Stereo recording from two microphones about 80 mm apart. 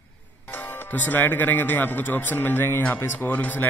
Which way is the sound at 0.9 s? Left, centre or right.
Left.